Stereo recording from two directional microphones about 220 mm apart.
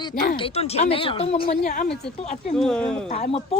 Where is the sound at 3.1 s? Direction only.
25° left (ahead or behind).